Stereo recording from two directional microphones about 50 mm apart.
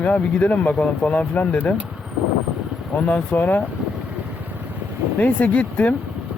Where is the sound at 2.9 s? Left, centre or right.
Left.